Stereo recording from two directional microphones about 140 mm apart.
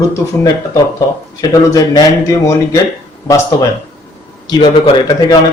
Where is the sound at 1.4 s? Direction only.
25° left (ahead or behind).